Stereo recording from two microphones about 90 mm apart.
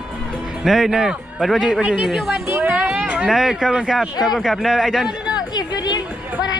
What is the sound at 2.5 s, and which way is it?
Speech, 25° right (ahead or behind).